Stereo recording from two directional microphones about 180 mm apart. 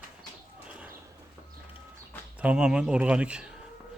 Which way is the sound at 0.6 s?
5° right (ahead or behind).